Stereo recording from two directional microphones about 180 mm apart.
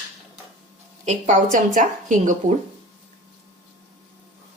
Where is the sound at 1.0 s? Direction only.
45° right (ahead or behind).